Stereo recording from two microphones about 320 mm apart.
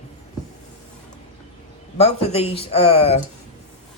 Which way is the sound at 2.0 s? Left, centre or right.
Centre.